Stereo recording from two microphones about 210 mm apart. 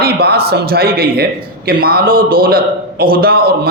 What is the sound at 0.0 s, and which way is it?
A man's voice, 50° right (ahead or behind).